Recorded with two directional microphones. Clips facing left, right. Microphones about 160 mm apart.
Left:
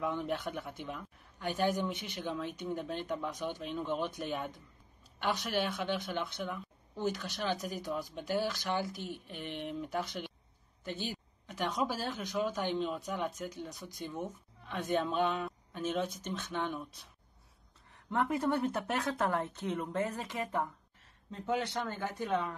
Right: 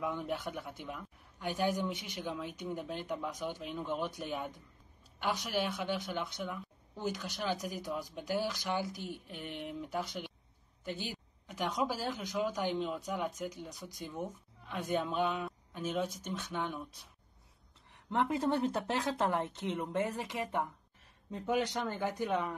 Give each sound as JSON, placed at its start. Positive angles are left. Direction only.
{"t": 0.0, "sound": "a man's voice", "side_deg": -10}
{"t": 17.9, "sound": "a woman's voice", "side_deg": -20}